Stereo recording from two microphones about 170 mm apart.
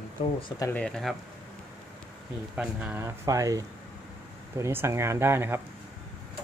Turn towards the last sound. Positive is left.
turn(degrees=-15)  # may be behind; listen again after turning